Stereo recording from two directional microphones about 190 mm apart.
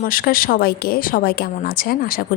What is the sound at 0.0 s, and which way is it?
Speech, 50° left (ahead or behind).